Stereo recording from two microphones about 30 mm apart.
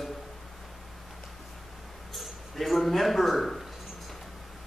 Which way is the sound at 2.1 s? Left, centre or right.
Centre.